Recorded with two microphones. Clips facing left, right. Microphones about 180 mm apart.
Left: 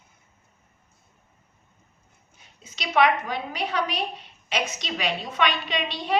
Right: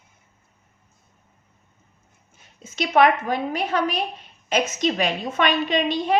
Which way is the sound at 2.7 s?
50° right (ahead or behind).